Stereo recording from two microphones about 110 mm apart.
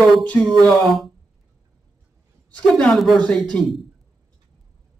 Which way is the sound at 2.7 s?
5° left (ahead or behind).